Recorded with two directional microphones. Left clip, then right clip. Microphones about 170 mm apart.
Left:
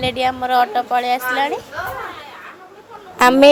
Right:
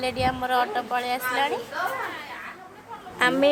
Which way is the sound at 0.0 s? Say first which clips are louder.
Left 6 dB; 20° left (ahead or behind).